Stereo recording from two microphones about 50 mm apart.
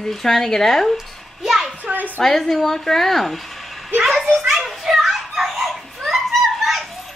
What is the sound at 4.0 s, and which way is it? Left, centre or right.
Children playing, centre.